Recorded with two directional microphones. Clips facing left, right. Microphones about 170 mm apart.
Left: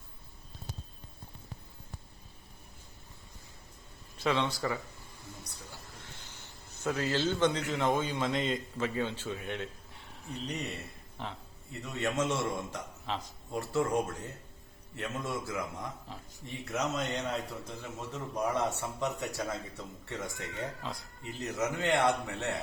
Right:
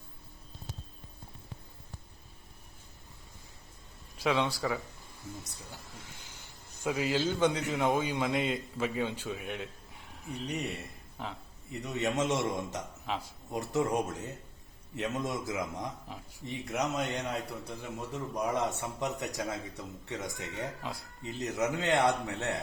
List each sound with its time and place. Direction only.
4.2 s a man's voice: 10° right (ahead or behind)
6.8 s a man's voice: 10° right (ahead or behind)
11.7 s a man's voice: 20° right (ahead or behind)
13.1 s a man's voice: 5° right (ahead or behind)
13.5 s a man's voice: 20° right (ahead or behind)